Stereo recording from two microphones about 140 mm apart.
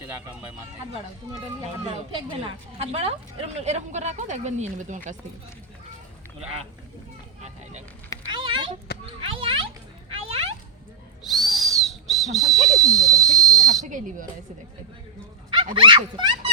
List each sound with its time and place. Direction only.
2.7 s a woman's voice: 50° right (ahead or behind)
7.4 s a woman's voice: 55° right (ahead or behind)
8.3 s a sound: 35° right (ahead or behind)
9.2 s speech: 40° right (ahead or behind)
10.1 s a sound: 45° right (ahead or behind)
11.2 s whistle: centre (ahead or behind)
15.4 s speech: 40° right (ahead or behind)